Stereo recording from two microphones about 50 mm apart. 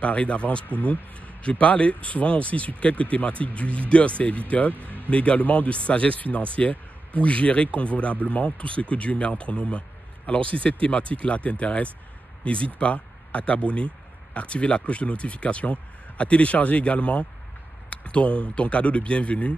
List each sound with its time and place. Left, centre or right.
0.0 s speech: left
4.7 s music: right
5.1 s speech: left